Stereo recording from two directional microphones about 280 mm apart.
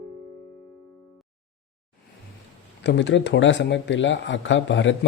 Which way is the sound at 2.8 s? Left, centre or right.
Left.